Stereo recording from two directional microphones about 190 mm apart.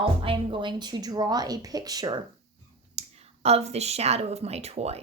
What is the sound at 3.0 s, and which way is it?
Speech, 35° right (ahead or behind).